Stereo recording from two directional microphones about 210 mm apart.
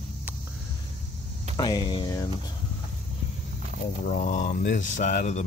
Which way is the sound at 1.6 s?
20° left (ahead or behind).